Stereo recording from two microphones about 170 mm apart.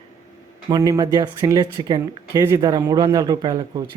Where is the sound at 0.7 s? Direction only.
20° right (ahead or behind).